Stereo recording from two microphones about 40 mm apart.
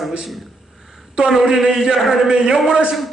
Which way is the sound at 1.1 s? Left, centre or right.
Centre.